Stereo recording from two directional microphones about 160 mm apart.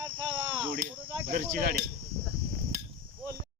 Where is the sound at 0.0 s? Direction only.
30° right (ahead or behind).